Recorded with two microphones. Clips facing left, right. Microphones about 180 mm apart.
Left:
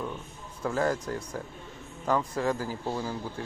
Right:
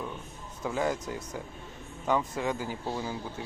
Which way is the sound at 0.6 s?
Centre (ahead or behind).